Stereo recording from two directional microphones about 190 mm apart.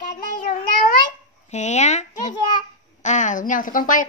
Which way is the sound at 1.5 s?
35° left (ahead or behind).